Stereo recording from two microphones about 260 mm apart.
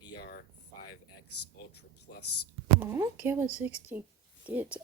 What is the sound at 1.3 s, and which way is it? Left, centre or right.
Speech, left.